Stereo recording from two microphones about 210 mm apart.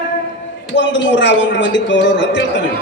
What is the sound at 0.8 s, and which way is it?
A man's voice, 60° left (ahead or behind).